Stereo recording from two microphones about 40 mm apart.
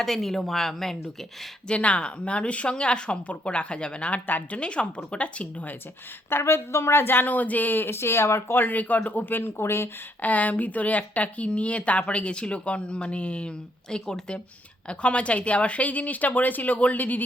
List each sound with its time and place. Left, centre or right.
0.0 s speech: centre
1.6 s speech: left
4.1 s speech: left
4.5 s speech: left
6.3 s speech: left
7.3 s speech: left
8.7 s speech: left
9.4 s speech: left
10.2 s speech: left